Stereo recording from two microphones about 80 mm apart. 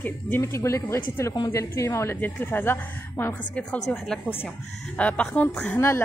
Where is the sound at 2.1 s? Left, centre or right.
Left.